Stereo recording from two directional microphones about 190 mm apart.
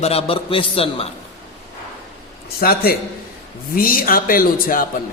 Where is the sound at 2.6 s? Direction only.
50° left (ahead or behind).